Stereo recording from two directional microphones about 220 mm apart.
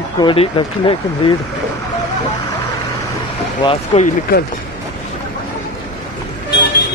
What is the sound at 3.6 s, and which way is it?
Speech, 25° left (ahead or behind).